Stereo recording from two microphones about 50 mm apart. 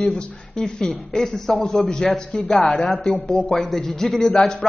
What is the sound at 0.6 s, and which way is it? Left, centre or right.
A man's voice, centre.